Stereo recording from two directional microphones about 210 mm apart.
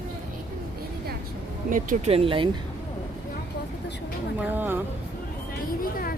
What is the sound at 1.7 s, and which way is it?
Speech, 40° right (ahead or behind).